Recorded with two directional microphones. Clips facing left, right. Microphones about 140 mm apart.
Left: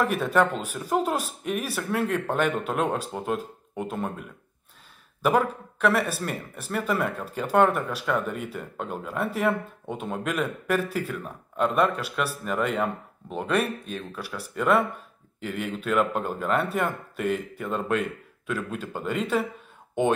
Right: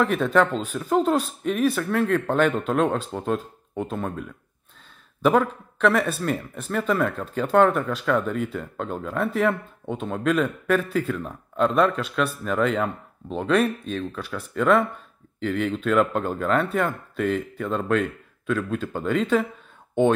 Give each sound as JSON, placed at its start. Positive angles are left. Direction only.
{"t": 0.0, "sound": "speech", "side_deg": 10}